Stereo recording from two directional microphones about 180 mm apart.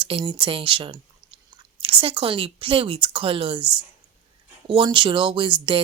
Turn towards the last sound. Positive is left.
turn(degrees=-25)  # may be behind; listen again after turning